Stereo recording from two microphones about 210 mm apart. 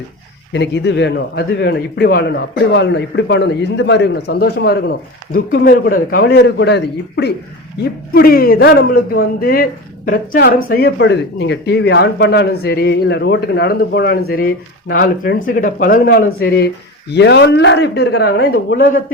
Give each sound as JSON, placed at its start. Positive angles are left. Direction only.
{"t": 0.5, "sound": "a man's voice", "side_deg": 55}